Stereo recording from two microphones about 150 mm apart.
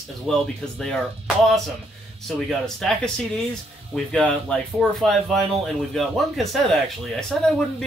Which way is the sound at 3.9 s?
5° left (ahead or behind).